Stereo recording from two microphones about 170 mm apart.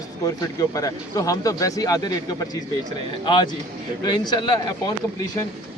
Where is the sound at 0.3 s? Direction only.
20° left (ahead or behind).